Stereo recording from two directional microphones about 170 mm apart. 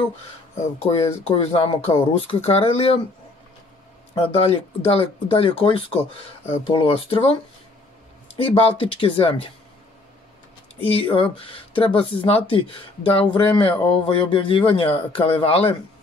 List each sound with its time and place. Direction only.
0.8 s speech: 35° left (ahead or behind)
4.1 s speech: 35° left (ahead or behind)
8.4 s speech: 35° left (ahead or behind)
10.9 s speech: 30° left (ahead or behind)